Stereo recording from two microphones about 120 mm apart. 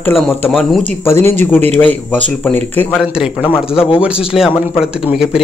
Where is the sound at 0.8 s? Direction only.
20° left (ahead or behind).